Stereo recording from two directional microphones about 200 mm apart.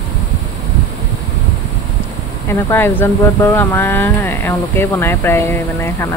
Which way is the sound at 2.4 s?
10° left (ahead or behind).